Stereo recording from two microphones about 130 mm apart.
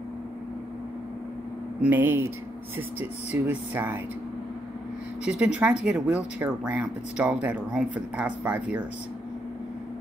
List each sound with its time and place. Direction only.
1.9 s speech: 15° right (ahead or behind)
3.4 s speech: 15° right (ahead or behind)
5.2 s speech: 10° right (ahead or behind)